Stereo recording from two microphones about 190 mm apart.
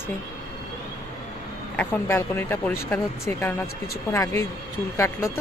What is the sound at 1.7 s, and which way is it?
Speech, 10° left (ahead or behind).